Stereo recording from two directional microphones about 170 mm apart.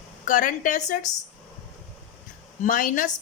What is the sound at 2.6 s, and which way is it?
Speech, 50° left (ahead or behind).